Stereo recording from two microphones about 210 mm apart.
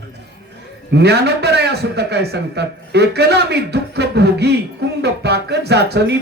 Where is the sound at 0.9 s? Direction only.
50° right (ahead or behind).